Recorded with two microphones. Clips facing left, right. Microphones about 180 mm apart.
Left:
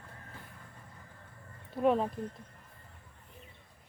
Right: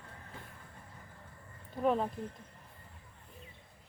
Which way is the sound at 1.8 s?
5° left (ahead or behind).